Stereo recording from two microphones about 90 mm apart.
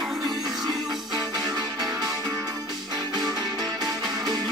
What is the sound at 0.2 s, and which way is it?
Music, 45° right (ahead or behind).